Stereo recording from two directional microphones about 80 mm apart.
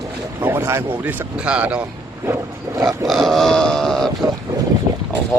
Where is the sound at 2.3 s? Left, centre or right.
Right.